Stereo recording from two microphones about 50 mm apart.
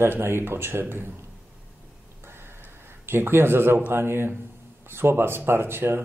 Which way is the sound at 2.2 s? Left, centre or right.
Right.